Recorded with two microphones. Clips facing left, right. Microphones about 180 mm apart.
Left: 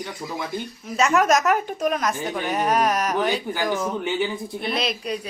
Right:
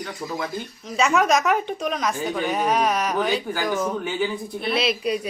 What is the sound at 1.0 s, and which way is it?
A woman's voice, centre (ahead or behind).